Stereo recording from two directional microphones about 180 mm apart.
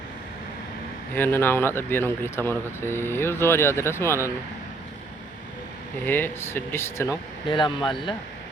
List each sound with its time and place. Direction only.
1.1 s speech: 10° left (ahead or behind)
6.1 s speech: 10° left (ahead or behind)
7.4 s speech: 25° left (ahead or behind)